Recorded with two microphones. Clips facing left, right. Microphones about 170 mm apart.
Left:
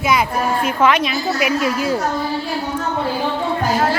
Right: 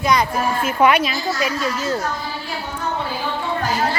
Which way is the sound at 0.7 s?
10° right (ahead or behind).